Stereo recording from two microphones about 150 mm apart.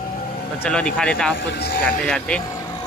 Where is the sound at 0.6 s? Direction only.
5° left (ahead or behind).